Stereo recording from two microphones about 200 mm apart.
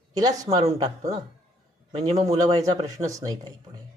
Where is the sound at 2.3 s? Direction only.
15° right (ahead or behind).